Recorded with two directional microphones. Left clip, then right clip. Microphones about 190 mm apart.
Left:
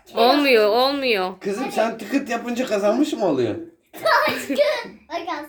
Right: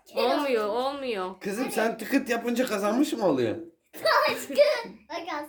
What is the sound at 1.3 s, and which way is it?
Speech, 45° right (ahead or behind).